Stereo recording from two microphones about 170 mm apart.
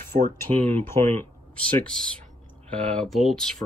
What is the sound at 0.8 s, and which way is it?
Speech, 15° left (ahead or behind).